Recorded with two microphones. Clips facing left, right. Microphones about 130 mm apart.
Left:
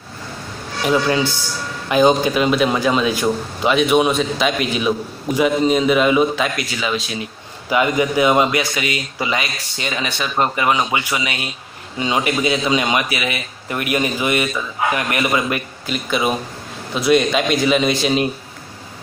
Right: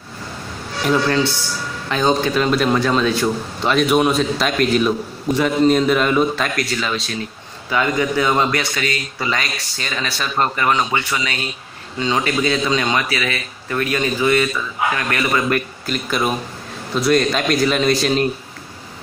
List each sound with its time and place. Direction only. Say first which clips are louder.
0.8 s a man's voice: even; 10° left (ahead or behind)